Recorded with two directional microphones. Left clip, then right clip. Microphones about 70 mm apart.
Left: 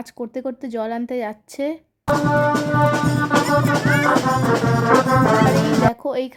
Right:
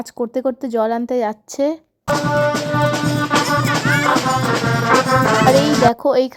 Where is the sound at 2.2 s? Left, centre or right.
Right.